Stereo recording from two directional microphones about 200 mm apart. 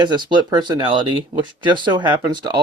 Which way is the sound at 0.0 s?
20° right (ahead or behind).